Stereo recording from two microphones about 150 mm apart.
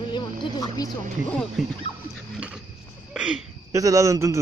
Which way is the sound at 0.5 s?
25° left (ahead or behind).